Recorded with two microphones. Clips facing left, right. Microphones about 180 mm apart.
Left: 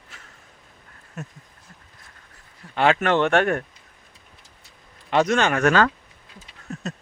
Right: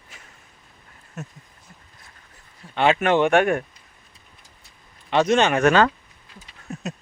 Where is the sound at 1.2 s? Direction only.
5° right (ahead or behind).